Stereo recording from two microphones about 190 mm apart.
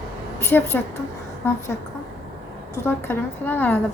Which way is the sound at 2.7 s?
10° left (ahead or behind).